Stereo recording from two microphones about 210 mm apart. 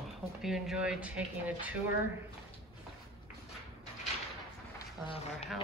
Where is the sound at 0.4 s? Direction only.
Centre (ahead or behind).